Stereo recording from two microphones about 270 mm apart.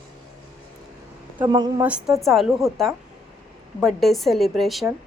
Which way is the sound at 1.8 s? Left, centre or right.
Centre.